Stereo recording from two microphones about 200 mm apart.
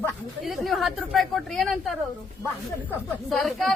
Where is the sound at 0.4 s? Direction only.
Centre (ahead or behind).